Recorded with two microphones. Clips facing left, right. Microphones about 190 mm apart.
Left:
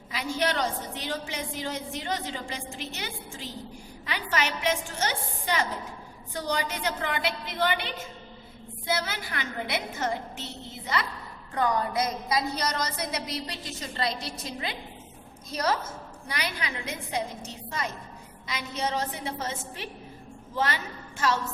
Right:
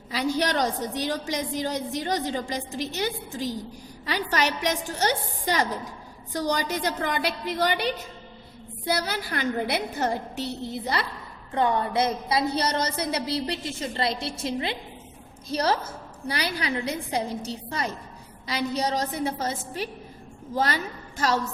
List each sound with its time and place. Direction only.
0.1 s a woman's voice: 35° right (ahead or behind)